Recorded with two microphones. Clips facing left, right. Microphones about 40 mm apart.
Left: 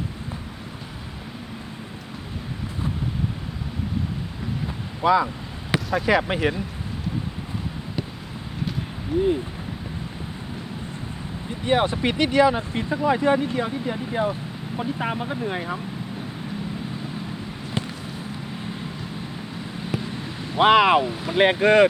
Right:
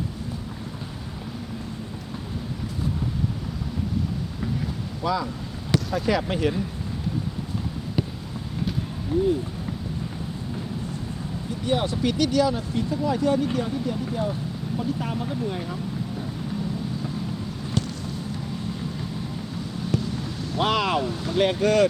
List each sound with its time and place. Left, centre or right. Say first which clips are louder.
5.0 s speech: left 7 dB; left
11.6 s speech: left 3 dB; left
19.9 s speech: right 2 dB; left